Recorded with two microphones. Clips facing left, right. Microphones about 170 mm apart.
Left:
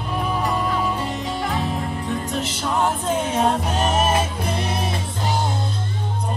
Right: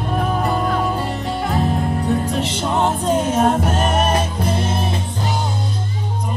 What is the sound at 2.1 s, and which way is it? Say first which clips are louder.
Music: right 5 dB; 35° right (ahead or behind).